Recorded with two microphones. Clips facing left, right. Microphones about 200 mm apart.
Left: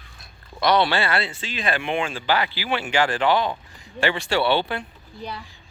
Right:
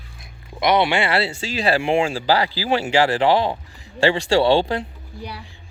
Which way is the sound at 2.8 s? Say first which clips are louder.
Right 3 dB; 25° right (ahead or behind).